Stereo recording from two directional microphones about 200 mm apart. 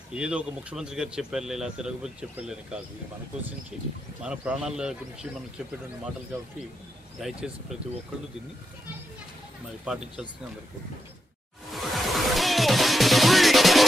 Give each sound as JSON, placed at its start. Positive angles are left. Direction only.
{"t": 0.1, "sound": "speech", "side_deg": -5}
{"t": 4.2, "sound": "speech", "side_deg": -5}
{"t": 7.2, "sound": "speech", "side_deg": -5}
{"t": 9.8, "sound": "speech", "side_deg": -5}
{"t": 11.7, "sound": "music", "side_deg": 0}